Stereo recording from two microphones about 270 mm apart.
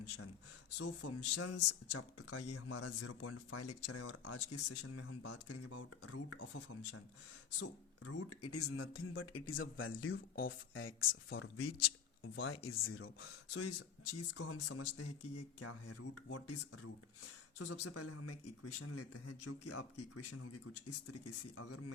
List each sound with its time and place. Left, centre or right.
0.8 s speech: left